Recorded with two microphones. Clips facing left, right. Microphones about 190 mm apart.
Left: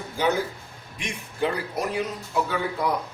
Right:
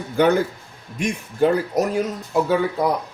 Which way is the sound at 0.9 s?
45° right (ahead or behind).